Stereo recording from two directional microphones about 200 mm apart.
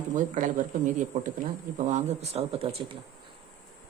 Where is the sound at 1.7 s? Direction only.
35° right (ahead or behind).